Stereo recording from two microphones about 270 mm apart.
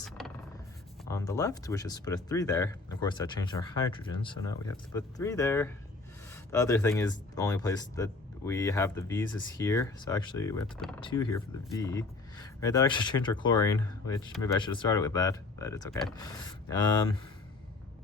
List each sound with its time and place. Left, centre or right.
1.0 s speech: centre
11.0 s speech: centre